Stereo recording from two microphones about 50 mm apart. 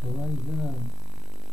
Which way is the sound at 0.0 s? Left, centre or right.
Centre.